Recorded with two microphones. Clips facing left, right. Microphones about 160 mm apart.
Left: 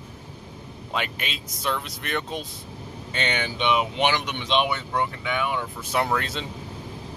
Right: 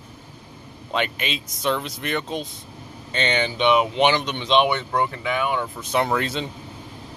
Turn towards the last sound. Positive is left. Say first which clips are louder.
# right 3 dB
turn(degrees=0)  # may be behind; listen again after turning